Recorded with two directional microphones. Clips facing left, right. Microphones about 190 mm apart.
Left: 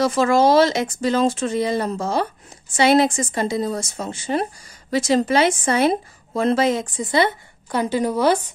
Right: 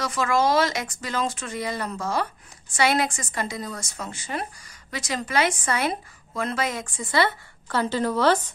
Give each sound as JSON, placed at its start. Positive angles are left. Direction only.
{"t": 0.0, "sound": "a woman's voice", "side_deg": 30}